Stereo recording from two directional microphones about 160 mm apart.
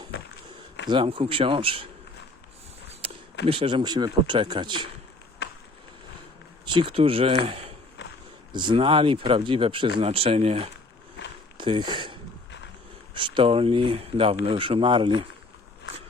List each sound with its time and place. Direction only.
0.9 s speech: 30° right (ahead or behind)
3.0 s a sound: 35° right (ahead or behind)
3.4 s speech: 35° right (ahead or behind)
5.4 s a sound: 90° left
6.7 s speech: 30° right (ahead or behind)
13.1 s speech: 30° right (ahead or behind)